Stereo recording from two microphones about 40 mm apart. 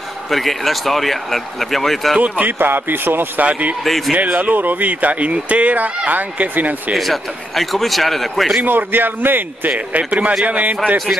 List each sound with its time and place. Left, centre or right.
0.3 s speech: centre
2.1 s speech: right
2.6 s a man's voice: right
3.4 s speech: right
3.8 s speech: centre
4.1 s speech: right
7.0 s speech: centre
8.6 s a man's voice: right
9.8 s speech: right